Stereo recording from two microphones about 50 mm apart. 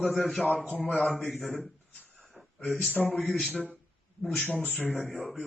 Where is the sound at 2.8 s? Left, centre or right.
Left.